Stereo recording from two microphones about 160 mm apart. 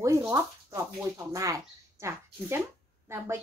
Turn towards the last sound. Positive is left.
turn(degrees=-15)  # may be behind; listen again after turning